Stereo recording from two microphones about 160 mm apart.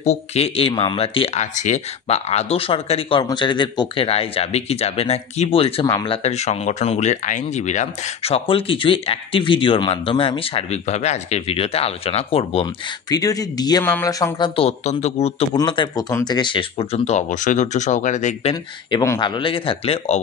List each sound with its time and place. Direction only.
0.0 s speech: 40° left (ahead or behind)
13.1 s speech: 20° left (ahead or behind)
14.6 s speech: 45° left (ahead or behind)
15.5 s speech: 30° left (ahead or behind)
16.1 s speech: 15° left (ahead or behind)
16.3 s speech: 30° left (ahead or behind); by 18.5 s 50° left (ahead or behind)
18.5 s speech: 30° left (ahead or behind)